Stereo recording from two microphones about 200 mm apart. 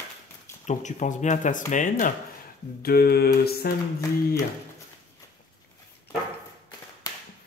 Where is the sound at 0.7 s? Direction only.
40° left (ahead or behind).